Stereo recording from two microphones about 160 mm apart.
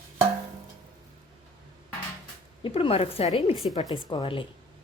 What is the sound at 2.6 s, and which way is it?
Speech, 35° left (ahead or behind).